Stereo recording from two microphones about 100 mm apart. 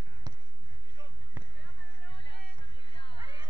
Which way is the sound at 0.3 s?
40° right (ahead or behind).